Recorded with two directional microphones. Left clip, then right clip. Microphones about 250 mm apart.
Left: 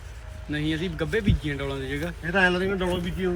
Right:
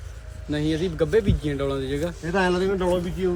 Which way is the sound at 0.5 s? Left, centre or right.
Right.